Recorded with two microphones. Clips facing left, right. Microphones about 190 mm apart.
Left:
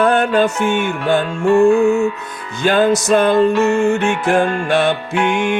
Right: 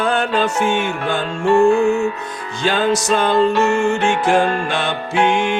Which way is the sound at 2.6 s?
55° left (ahead or behind).